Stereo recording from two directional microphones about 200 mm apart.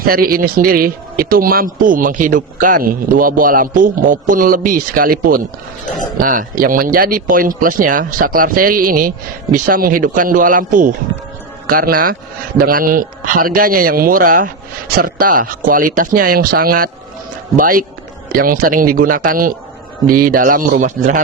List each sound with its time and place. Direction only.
0.0 s a man's voice: 45° right (ahead or behind)